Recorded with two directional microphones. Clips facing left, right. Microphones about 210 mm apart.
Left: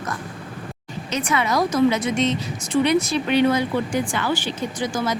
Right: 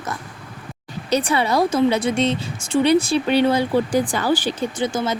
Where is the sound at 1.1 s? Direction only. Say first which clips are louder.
Right 3 dB; 30° right (ahead or behind).